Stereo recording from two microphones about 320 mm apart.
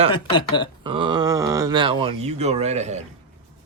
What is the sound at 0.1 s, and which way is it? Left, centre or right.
Speech, centre.